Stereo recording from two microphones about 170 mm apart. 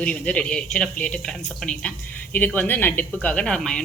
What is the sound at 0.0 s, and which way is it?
A woman's voice, 5° left (ahead or behind).